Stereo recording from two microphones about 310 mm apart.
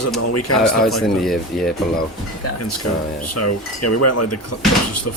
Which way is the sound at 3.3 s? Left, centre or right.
Left.